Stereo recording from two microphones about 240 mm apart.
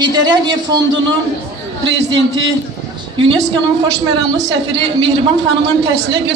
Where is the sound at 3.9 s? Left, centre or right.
Right.